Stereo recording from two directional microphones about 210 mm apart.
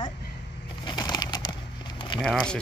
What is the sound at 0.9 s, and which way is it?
Bird, 20° left (ahead or behind).